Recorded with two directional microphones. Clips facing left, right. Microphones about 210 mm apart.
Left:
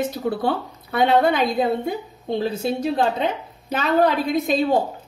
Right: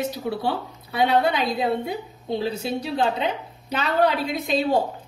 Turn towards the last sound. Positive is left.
turn(degrees=45)  # may be behind; listen again after turning